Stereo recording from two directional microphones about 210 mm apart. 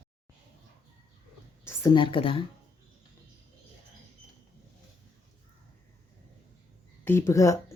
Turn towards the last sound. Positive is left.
turn(degrees=15)  # may be behind; listen again after turning